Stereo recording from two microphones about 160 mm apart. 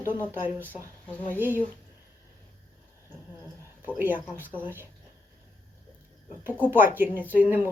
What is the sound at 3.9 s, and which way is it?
Speech, 10° right (ahead or behind).